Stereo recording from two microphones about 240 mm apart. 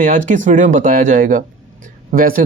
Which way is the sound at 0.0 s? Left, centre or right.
Right.